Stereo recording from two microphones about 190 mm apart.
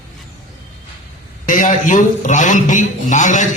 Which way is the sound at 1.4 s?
45° left (ahead or behind).